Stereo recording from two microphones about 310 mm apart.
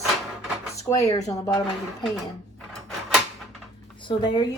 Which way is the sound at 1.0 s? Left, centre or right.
Centre.